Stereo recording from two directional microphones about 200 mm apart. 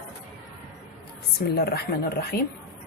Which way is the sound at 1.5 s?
50° left (ahead or behind).